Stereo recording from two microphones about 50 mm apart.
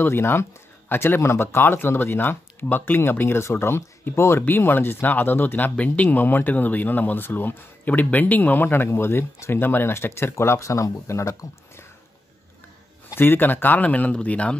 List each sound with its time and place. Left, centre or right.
0.0 s speech: left
4.5 s speech: left
10.3 s speech: left
13.1 s speech: left